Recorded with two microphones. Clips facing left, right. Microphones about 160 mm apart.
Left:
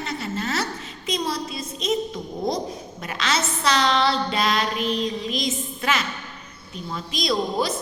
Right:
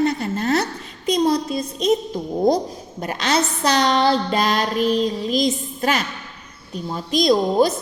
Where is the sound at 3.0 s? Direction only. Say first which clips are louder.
Right 6 dB; 40° right (ahead or behind).